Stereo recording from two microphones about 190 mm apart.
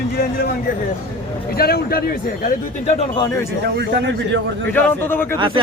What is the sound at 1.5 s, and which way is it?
A man's voice, 55° left (ahead or behind).